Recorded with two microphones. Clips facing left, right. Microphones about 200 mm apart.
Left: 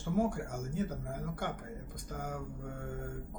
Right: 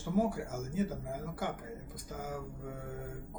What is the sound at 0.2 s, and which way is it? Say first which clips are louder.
Speech: right 1 dB; 5° right (ahead or behind).